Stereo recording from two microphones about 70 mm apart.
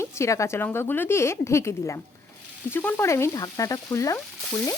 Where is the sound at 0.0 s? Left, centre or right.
Left.